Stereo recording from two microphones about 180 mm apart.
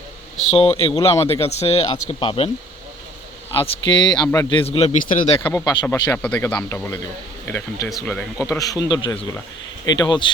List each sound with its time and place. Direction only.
0.5 s speech: 30° left (ahead or behind)
3.6 s speech: 30° left (ahead or behind)
5.4 s speech: 10° left (ahead or behind)
5.6 s speech: 20° left (ahead or behind)
6.2 s speech: 5° left (ahead or behind)
8.4 s speech: 20° left (ahead or behind)